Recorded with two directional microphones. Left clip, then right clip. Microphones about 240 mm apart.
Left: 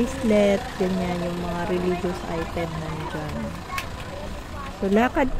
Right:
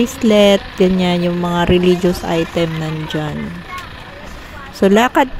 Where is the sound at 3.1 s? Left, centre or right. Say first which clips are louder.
Right 14 dB; right.